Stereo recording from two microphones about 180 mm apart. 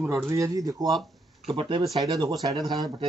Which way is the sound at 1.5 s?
30° right (ahead or behind).